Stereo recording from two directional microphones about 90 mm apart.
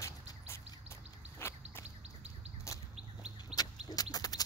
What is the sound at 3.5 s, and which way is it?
Bird, 45° left (ahead or behind).